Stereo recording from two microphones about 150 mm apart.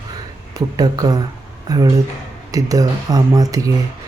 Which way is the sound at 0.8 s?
25° right (ahead or behind).